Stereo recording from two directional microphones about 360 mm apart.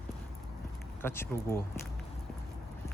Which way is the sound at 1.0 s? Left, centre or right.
Centre.